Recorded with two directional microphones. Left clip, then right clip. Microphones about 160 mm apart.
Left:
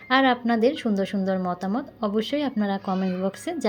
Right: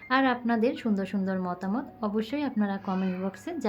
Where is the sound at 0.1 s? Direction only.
15° left (ahead or behind).